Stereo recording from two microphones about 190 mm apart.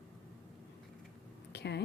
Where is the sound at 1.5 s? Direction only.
60° left (ahead or behind).